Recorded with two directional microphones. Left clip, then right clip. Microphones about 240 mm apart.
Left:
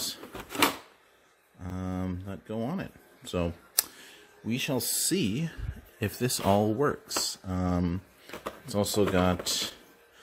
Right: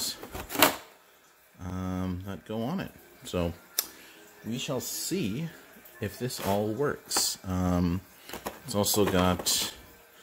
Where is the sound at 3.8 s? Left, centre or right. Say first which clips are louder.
Left 3 dB; centre.